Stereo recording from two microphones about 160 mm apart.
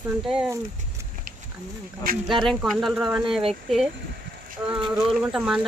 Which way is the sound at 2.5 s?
Centre (ahead or behind).